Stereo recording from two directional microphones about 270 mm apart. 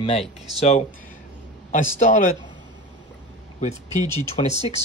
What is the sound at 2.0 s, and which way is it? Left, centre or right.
Speech, left.